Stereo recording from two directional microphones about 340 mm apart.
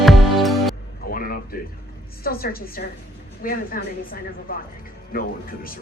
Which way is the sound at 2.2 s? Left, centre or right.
Left.